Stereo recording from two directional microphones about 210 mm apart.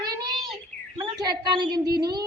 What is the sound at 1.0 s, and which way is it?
A woman's voice, 20° right (ahead or behind).